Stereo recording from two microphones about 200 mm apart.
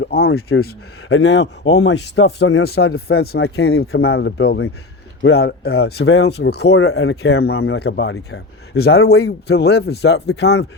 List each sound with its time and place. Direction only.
0.0 s speech: 55° left (ahead or behind)
1.0 s speech: 60° left (ahead or behind)
2.6 s speech: 55° left (ahead or behind)